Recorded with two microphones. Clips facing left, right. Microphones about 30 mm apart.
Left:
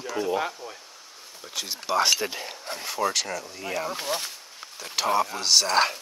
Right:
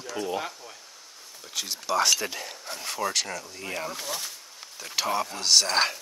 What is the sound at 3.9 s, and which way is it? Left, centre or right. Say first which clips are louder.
Speech: left 4 dB; left.